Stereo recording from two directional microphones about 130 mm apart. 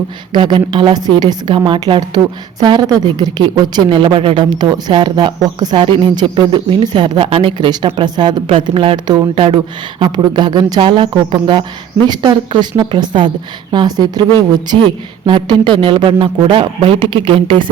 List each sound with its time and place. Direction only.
0.3 s a woman's voice: 35° right (ahead or behind)
8.4 s a woman's voice: 45° right (ahead or behind)